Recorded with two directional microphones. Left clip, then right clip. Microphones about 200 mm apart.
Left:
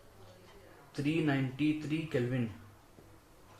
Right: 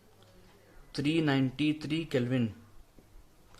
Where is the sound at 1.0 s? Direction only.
50° right (ahead or behind).